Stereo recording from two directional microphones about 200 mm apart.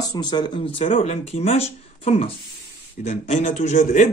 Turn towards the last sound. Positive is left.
turn(degrees=40)  # may be behind; listen again after turning